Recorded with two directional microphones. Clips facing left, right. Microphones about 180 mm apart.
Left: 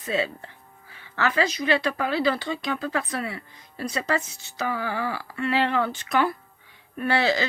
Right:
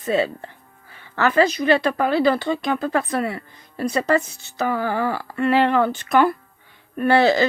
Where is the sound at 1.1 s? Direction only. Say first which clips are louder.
Right 6 dB; 50° right (ahead or behind).